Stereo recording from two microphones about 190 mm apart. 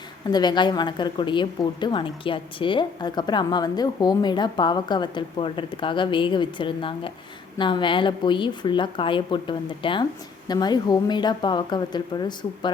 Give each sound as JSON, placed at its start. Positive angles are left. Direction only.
{"t": 0.3, "sound": "a woman's voice", "side_deg": 20}